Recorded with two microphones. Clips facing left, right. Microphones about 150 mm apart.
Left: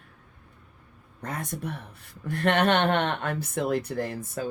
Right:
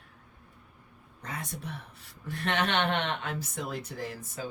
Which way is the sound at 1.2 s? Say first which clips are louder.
Left 6 dB; 55° left (ahead or behind).